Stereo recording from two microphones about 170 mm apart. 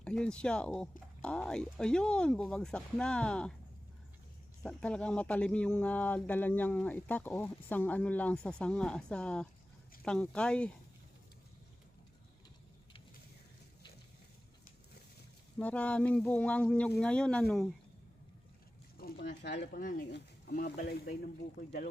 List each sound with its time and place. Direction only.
0.0 s speech: 5° left (ahead or behind)
4.6 s speech: 5° left (ahead or behind)
15.5 s speech: 10° left (ahead or behind)
18.9 s speech: 65° left (ahead or behind); by 19.8 s 90° left
19.8 s speech: 55° left (ahead or behind)
20.1 s speech: 75° left (ahead or behind)